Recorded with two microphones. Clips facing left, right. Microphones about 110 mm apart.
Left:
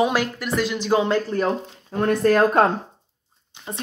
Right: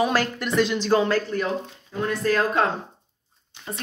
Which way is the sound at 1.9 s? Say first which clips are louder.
Left 5 dB; 50° left (ahead or behind).